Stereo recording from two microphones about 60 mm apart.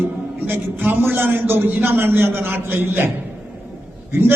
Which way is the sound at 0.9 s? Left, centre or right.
Right.